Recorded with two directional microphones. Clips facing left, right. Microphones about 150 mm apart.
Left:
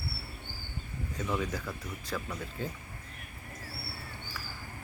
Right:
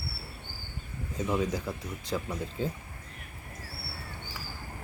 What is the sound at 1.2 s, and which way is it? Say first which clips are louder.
Speech: right 4 dB; 20° right (ahead or behind).